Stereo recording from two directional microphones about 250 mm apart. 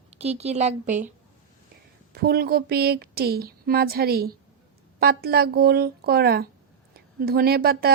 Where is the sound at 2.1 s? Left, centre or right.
Right.